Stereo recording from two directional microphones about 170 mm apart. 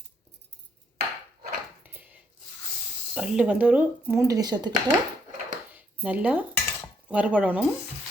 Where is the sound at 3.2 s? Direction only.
5° right (ahead or behind); by 4.7 s 25° right (ahead or behind).